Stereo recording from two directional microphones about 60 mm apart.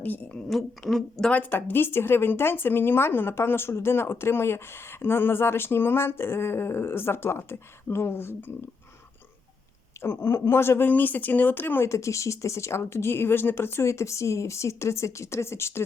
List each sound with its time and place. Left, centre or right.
0.0 s a woman's voice: left
0.4 s speech: centre
1.3 s speech: left
10.0 s speech: left
11.9 s speech: left